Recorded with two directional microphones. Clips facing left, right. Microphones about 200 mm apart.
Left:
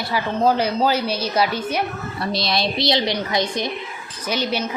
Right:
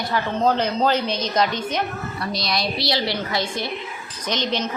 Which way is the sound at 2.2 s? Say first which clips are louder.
Left 4 dB; 25° left (ahead or behind).